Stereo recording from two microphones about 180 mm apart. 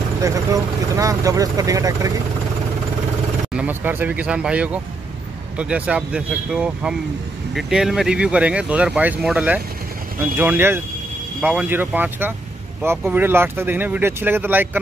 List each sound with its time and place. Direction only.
0.2 s speech: 20° right (ahead or behind)
3.5 s speech: 10° right (ahead or behind)